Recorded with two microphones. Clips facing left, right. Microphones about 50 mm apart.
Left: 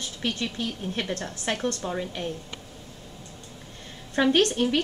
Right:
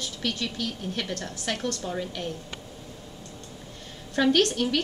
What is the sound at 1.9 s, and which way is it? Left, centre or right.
Speech, centre.